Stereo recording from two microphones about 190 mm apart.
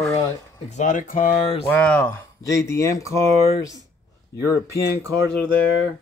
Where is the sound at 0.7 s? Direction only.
40° left (ahead or behind).